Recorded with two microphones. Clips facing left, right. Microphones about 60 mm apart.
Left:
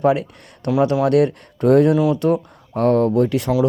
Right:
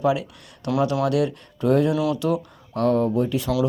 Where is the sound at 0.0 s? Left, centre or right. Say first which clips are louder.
Left 5 dB; left.